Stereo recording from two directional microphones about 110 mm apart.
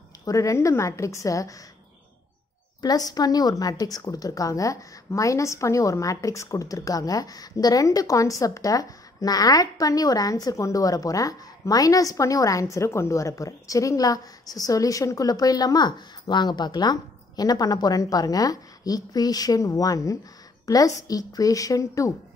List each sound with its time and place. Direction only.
0.2 s a woman's voice: 30° left (ahead or behind)
2.8 s speech: 35° left (ahead or behind)